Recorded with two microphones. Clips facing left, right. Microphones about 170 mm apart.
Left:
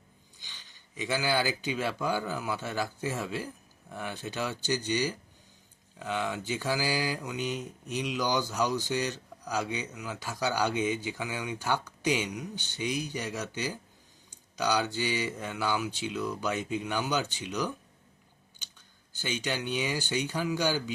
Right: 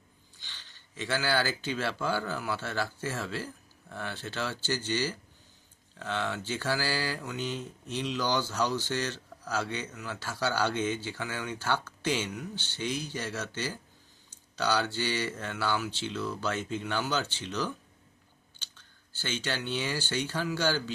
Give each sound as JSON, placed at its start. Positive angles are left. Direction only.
{"t": 0.3, "sound": "speech", "side_deg": 15}
{"t": 19.1, "sound": "speech", "side_deg": 15}